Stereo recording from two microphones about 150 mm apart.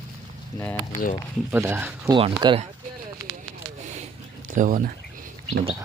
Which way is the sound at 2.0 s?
30° right (ahead or behind).